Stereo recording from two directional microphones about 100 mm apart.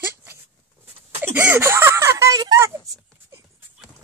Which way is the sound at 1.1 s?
15° right (ahead or behind).